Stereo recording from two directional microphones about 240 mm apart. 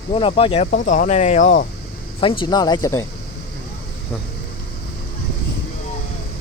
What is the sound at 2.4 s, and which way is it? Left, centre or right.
Speech, centre.